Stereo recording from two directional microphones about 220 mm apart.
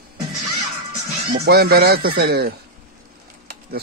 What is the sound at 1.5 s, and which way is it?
Speech, 45° right (ahead or behind).